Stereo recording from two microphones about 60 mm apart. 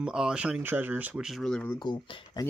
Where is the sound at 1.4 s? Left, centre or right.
Centre.